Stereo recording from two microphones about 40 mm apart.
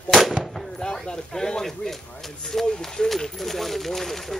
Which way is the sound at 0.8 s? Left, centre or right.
Centre.